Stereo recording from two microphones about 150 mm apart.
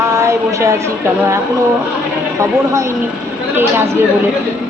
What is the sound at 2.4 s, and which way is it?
A woman's voice, 20° right (ahead or behind).